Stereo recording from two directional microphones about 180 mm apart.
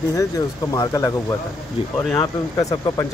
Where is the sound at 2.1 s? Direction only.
20° left (ahead or behind).